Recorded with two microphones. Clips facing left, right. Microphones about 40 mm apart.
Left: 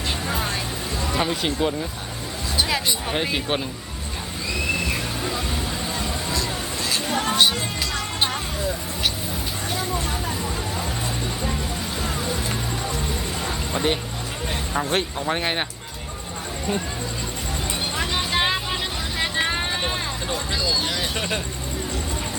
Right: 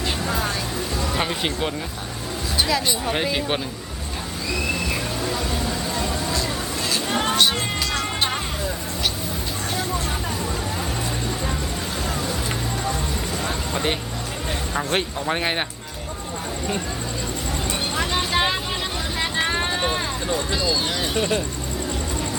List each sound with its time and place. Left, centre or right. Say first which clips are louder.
1.2 s speech: left 4 dB; centre
7.1 s music: right 1 dB; right
13.4 s a sound: left 1 dB; centre
14.9 s speech: right 2 dB; centre
17.9 s music: right 2 dB; centre
19.2 s vehicle: even; centre
20.5 s vehicle: right 1 dB; centre
21.2 s speech: right 4 dB; left